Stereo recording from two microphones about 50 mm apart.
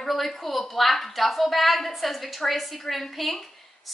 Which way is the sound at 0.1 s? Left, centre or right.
Centre.